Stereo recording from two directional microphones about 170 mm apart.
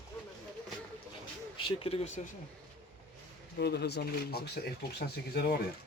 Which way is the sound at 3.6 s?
75° left (ahead or behind).